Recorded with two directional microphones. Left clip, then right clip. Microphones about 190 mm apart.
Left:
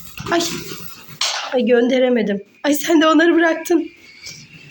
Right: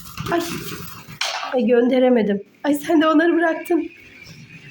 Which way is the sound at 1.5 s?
Centre (ahead or behind).